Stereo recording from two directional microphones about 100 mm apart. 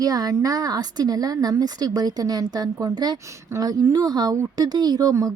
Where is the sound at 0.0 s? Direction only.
40° right (ahead or behind).